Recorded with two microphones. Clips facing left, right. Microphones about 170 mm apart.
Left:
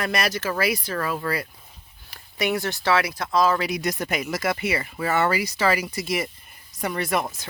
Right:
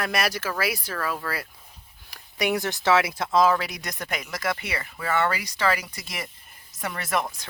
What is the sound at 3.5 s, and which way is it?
Speech, centre (ahead or behind).